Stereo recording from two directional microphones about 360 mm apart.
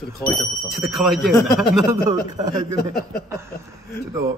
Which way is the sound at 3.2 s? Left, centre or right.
Centre.